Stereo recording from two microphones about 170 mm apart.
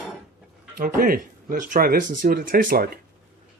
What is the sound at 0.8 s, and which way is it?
Speech, 55° right (ahead or behind).